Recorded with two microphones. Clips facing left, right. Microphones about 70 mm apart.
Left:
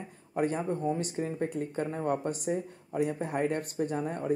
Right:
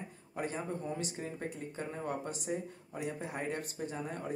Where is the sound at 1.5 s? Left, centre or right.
Left.